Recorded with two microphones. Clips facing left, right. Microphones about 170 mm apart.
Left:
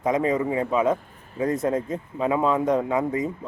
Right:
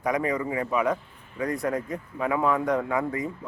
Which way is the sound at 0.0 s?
20° left (ahead or behind).